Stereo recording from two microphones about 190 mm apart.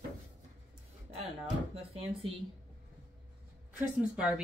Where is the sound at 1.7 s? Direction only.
30° right (ahead or behind).